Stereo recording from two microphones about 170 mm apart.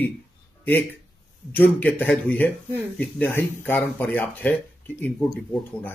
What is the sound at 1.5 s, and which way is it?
Speech, 10° left (ahead or behind).